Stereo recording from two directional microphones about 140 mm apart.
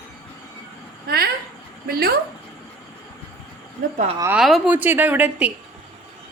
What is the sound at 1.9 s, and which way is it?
Speech, 90° right.